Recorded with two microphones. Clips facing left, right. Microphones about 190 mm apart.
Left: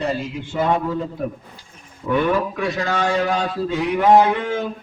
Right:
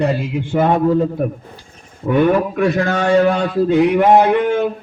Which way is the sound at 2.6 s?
55° right (ahead or behind).